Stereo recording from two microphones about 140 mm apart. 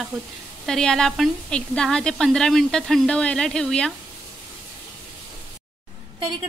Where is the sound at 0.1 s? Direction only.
Centre (ahead or behind).